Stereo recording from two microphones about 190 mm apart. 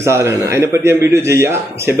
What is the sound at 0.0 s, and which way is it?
A man's voice, 15° right (ahead or behind).